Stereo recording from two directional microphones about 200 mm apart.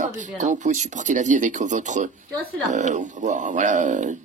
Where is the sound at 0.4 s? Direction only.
40° right (ahead or behind).